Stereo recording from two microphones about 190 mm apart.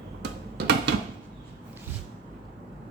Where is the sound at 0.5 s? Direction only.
65° right (ahead or behind).